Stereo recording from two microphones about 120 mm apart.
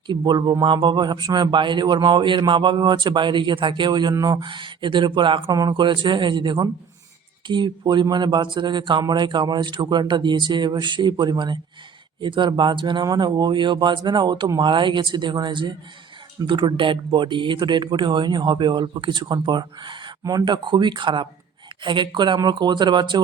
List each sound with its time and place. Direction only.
0.1 s speech: 40° right (ahead or behind)